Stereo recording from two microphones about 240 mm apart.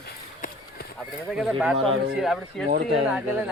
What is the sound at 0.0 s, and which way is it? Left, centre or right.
Run, left.